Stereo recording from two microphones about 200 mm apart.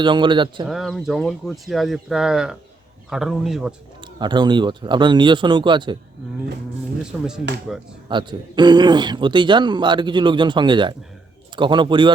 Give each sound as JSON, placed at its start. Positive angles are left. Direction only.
{"t": 0.0, "sound": "speech", "side_deg": -25}
{"t": 0.7, "sound": "speech", "side_deg": 0}
{"t": 4.2, "sound": "speech", "side_deg": -20}
{"t": 7.0, "sound": "speech", "side_deg": -5}
{"t": 8.1, "sound": "speech", "side_deg": -25}